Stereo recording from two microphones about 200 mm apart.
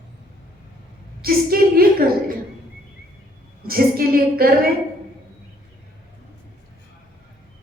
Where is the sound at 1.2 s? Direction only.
50° right (ahead or behind).